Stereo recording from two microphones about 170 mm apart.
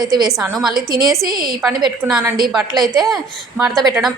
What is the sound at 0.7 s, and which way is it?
Speech, 60° right (ahead or behind).